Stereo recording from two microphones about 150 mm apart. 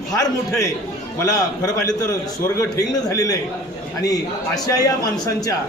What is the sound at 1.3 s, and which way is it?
A man's voice, 20° left (ahead or behind).